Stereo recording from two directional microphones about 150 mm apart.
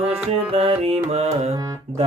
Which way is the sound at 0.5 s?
40° right (ahead or behind).